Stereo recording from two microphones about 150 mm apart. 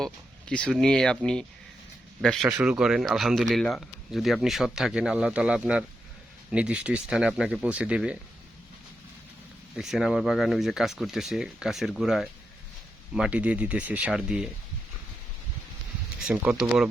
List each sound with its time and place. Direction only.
0.0 s speech: 5° left (ahead or behind)
9.7 s speech: 5° right (ahead or behind)
16.2 s speech: 5° right (ahead or behind)